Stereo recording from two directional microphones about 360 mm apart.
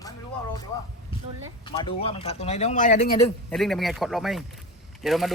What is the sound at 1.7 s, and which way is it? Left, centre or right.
Speech, centre.